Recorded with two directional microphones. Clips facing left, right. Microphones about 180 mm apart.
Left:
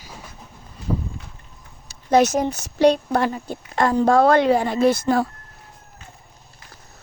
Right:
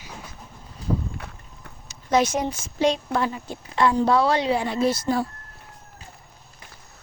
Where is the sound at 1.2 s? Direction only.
60° right (ahead or behind).